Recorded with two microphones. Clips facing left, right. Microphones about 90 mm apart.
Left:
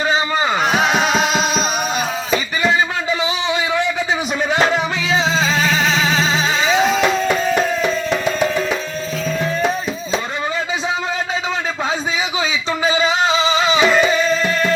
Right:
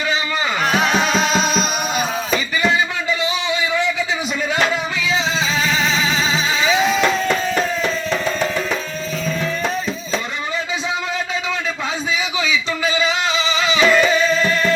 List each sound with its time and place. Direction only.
0.7 s music: 15° left (ahead or behind)
4.7 s music: 40° left (ahead or behind)
6.7 s music: 20° left (ahead or behind)
12.4 s a sound: 25° left (ahead or behind)
13.0 s a sound: 40° left (ahead or behind)
13.7 s music: 15° left (ahead or behind)